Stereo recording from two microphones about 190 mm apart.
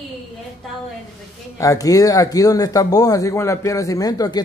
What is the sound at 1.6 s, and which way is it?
Speech, 15° left (ahead or behind).